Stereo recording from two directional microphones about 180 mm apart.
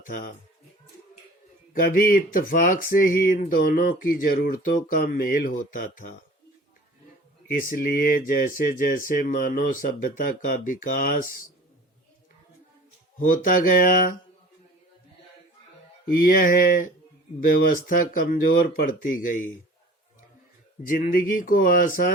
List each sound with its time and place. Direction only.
1.8 s speech: 50° left (ahead or behind)
7.4 s speech: 50° left (ahead or behind)
13.1 s speech: 50° left (ahead or behind)
16.0 s speech: 55° left (ahead or behind)
20.8 s speech: 50° left (ahead or behind)